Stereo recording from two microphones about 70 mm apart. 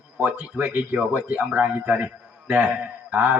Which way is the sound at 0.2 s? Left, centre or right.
Right.